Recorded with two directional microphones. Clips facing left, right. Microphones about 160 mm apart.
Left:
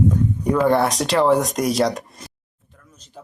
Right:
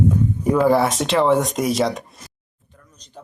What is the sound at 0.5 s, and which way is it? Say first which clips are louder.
A man's voice: right 1 dB; 5° right (ahead or behind).